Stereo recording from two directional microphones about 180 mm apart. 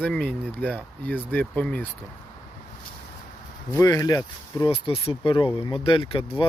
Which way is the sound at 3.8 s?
20° left (ahead or behind).